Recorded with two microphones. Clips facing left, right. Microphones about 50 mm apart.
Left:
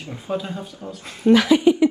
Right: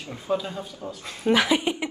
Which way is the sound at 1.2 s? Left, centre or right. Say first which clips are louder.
Left 6 dB; centre.